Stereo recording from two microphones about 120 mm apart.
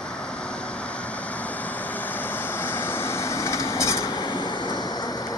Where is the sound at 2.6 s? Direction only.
20° left (ahead or behind).